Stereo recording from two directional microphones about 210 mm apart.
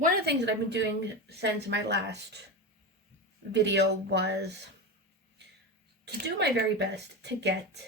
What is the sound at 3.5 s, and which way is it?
Speech, 55° right (ahead or behind).